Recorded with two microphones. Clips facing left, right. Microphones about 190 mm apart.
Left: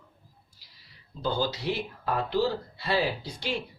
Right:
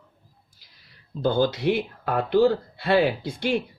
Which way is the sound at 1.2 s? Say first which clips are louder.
Right 7 dB; 55° right (ahead or behind).